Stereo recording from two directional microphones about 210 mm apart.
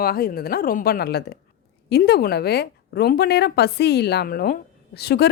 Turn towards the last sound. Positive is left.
turn(degrees=50)  # may be behind; listen again after turning